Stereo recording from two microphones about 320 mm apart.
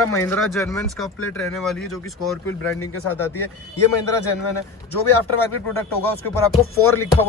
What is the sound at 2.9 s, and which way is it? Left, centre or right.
Speech, left.